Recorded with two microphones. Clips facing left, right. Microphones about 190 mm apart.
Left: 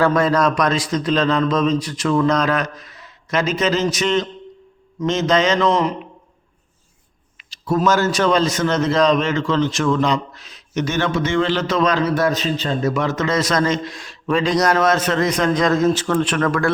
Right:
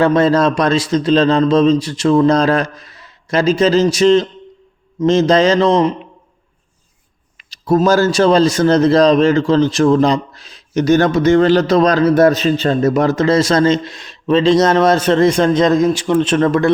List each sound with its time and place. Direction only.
0.0 s a man's voice: 25° right (ahead or behind)
7.3 s a sound: 40° right (ahead or behind)
7.8 s a man's voice: 30° right (ahead or behind)
12.1 s a man's voice: 60° right (ahead or behind)
12.9 s a man's voice: 35° right (ahead or behind); by 16.1 s 15° right (ahead or behind)
16.2 s a man's voice: 25° right (ahead or behind)